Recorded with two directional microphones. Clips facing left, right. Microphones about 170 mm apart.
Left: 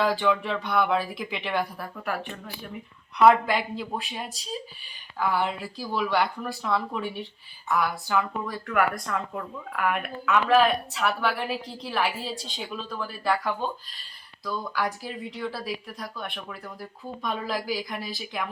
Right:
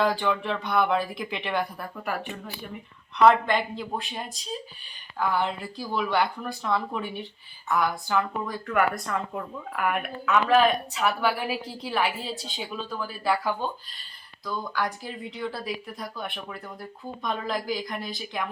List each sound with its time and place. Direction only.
0.0 s speech: centre (ahead or behind)